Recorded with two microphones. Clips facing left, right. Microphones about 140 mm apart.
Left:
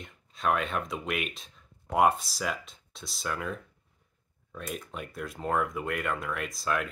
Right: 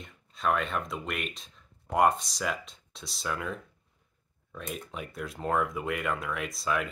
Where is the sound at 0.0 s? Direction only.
Centre (ahead or behind).